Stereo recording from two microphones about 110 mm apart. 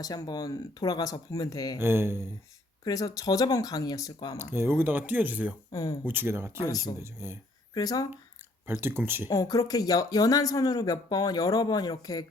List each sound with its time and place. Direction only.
0.0 s speech: 35° left (ahead or behind)
1.8 s speech: 20° right (ahead or behind)
2.8 s speech: 30° left (ahead or behind)
4.4 s speech: 20° right (ahead or behind)
5.7 s speech: 35° left (ahead or behind)
6.1 s speech: 20° right (ahead or behind)
6.6 s speech: 35° left (ahead or behind)
7.0 s speech: 20° right (ahead or behind)
7.7 s speech: 35° left (ahead or behind)
8.6 s speech: 20° right (ahead or behind)
9.3 s speech: 35° left (ahead or behind)